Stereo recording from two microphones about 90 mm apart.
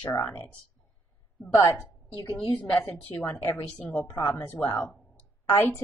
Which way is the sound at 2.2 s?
75° left (ahead or behind).